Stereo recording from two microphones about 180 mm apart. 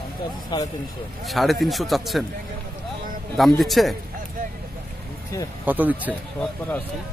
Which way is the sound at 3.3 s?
Centre (ahead or behind).